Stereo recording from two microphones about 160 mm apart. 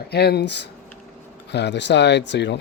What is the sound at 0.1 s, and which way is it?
Speech, 90° left.